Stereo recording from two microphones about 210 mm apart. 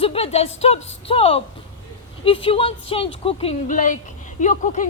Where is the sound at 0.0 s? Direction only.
30° left (ahead or behind).